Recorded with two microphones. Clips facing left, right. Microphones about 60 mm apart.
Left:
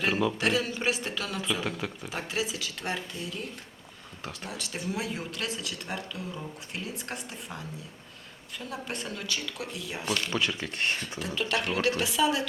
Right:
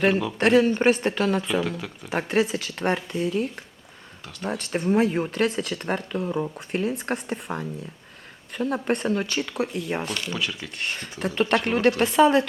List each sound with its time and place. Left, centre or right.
0.1 s speech: centre
0.3 s speech: right
10.2 s speech: centre
11.2 s speech: right